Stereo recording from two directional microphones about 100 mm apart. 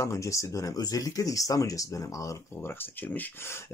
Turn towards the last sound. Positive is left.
turn(degrees=25)  # may be behind; listen again after turning